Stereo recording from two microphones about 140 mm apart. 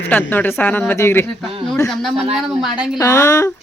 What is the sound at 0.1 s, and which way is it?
Speech, 15° left (ahead or behind).